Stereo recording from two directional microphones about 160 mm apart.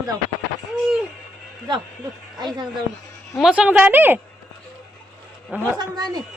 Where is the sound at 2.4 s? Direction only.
25° right (ahead or behind).